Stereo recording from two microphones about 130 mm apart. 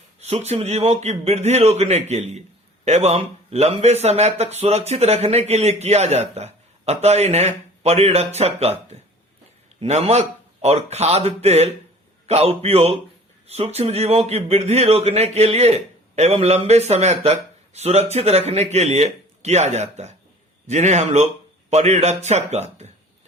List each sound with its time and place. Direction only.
0.2 s a man's voice: 55° right (ahead or behind)